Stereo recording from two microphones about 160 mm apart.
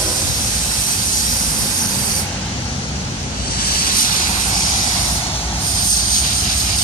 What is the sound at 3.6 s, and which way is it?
Vehicle, 70° left (ahead or behind).